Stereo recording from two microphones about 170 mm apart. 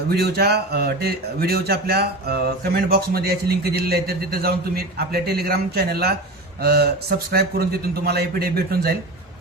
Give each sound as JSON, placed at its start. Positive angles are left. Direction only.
{"t": 0.1, "sound": "a man's voice", "side_deg": -70}